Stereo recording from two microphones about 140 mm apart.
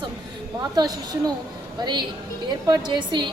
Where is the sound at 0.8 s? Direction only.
30° right (ahead or behind).